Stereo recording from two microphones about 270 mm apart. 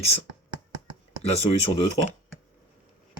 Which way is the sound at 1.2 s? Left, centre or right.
Left.